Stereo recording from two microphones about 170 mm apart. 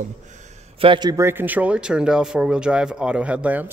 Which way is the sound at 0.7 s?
30° right (ahead or behind).